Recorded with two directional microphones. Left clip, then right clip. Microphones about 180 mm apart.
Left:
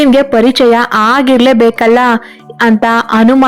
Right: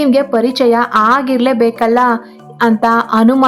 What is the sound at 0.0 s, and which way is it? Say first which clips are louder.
A woman's voice: left 5 dB; 25° left (ahead or behind).